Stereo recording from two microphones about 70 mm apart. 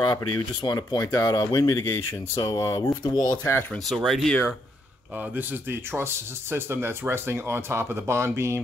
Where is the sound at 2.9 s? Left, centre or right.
Left.